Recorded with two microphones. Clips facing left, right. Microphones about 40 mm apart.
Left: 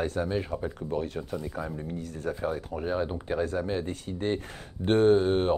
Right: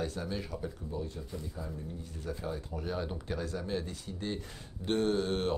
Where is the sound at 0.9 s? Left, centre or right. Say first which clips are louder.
Left 8 dB; left.